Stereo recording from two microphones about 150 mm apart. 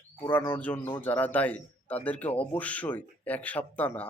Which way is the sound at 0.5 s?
10° left (ahead or behind).